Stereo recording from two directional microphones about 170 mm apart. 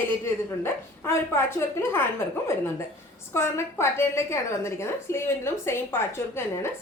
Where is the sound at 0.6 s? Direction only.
15° left (ahead or behind).